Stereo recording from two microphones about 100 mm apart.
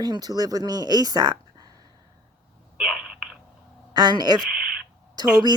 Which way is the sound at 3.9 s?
45° right (ahead or behind).